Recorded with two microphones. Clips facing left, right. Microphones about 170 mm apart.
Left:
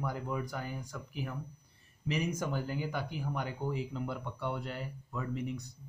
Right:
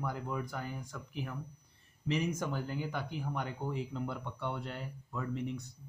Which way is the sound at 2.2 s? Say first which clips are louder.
Left 1 dB; 10° left (ahead or behind).